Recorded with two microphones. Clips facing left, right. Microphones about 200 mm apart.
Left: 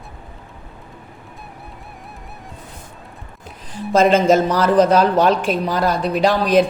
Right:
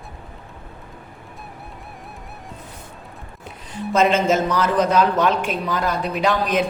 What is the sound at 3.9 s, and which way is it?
A man's voice, 35° left (ahead or behind).